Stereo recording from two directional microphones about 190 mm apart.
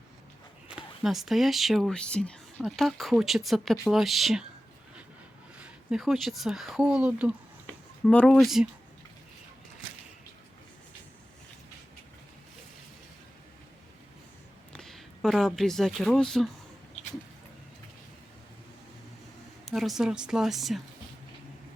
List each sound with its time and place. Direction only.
0.7 s speech: 5° right (ahead or behind)
5.5 s speech: 5° right (ahead or behind)
8.0 s speech: 5° left (ahead or behind)
14.7 s speech: centre (ahead or behind)
19.6 s speech: centre (ahead or behind)